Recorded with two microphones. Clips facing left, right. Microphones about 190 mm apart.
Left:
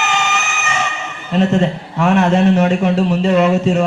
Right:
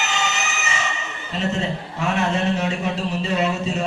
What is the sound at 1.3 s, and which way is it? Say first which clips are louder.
A man's voice: left 9 dB; 65° left (ahead or behind).